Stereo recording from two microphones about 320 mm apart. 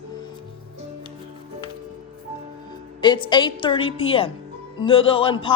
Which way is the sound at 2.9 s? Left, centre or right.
Centre.